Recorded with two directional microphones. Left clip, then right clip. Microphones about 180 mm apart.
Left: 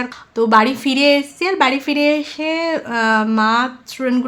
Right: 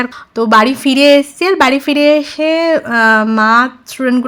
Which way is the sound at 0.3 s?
25° right (ahead or behind).